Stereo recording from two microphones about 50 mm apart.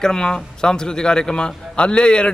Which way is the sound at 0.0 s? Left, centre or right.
Centre.